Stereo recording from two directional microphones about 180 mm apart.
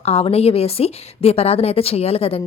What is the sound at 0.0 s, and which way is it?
A woman's voice, 35° left (ahead or behind).